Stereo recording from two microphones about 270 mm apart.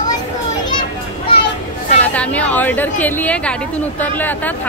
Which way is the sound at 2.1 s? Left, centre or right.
Centre.